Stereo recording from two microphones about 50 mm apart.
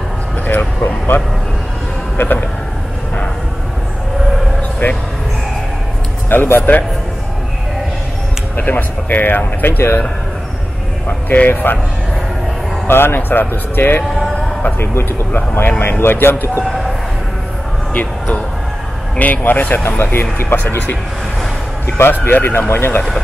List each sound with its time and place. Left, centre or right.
0.5 s speech: left
4.8 s speech: left
6.2 s a man's voice: left
8.5 s speech: left
11.4 s speech: left
12.8 s speech: left
16.6 s a sound: centre
17.9 s speech: left
21.8 s speech: left